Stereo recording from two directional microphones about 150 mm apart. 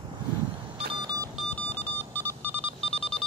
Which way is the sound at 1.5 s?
10° left (ahead or behind).